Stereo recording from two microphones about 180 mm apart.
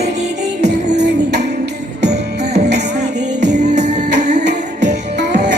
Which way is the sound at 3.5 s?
40° right (ahead or behind).